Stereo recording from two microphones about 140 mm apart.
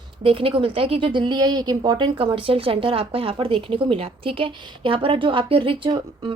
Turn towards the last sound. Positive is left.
turn(degrees=-40)  # may be behind; listen again after turning